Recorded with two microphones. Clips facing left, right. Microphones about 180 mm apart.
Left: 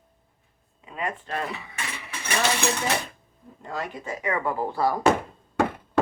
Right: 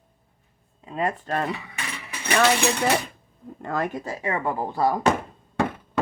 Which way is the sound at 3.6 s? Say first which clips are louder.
Right 5 dB; 55° right (ahead or behind).